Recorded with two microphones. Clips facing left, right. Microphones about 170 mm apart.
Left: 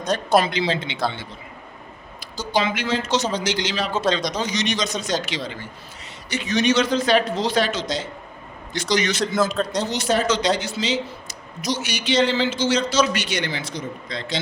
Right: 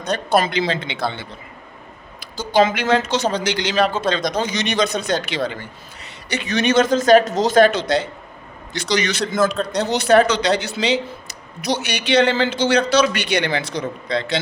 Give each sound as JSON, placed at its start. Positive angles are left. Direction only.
{"t": 0.4, "sound": "speech", "side_deg": -55}
{"t": 2.3, "sound": "a man's voice", "side_deg": -55}